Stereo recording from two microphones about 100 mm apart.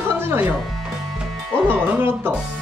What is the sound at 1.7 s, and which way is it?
Speech, 20° right (ahead or behind).